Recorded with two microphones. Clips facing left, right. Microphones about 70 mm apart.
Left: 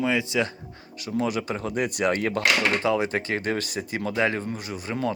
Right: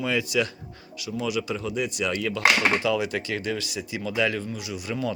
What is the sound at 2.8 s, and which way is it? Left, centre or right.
Speech, left.